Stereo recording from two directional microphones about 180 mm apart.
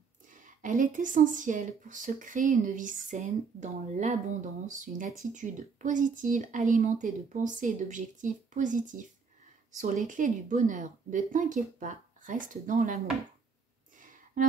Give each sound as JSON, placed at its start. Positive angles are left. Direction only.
{"t": 0.6, "sound": "speech", "side_deg": -45}
{"t": 9.7, "sound": "a sound", "side_deg": -45}
{"t": 10.0, "sound": "speech", "side_deg": -45}
{"t": 14.3, "sound": "music", "side_deg": -50}